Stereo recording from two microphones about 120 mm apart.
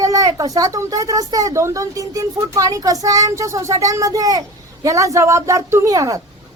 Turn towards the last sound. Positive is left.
turn(degrees=-30)  # may be behind; listen again after turning